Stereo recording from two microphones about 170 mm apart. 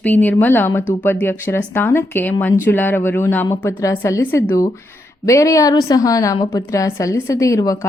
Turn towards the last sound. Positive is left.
turn(degrees=20)  # may be behind; listen again after turning